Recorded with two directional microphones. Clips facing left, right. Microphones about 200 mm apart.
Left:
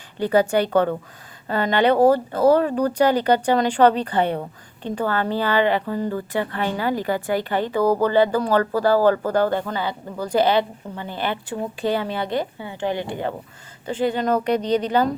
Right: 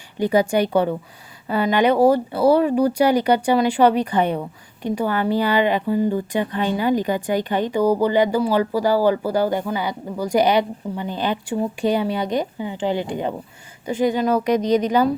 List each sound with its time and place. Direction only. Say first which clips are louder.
0.2 s speech: right 1 dB; 15° right (ahead or behind)